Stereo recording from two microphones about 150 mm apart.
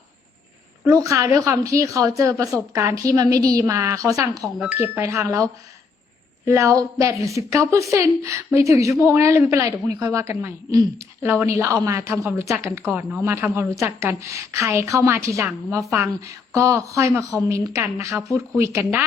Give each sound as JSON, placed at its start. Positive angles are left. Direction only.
{"t": 0.9, "sound": "a woman's voice", "side_deg": -20}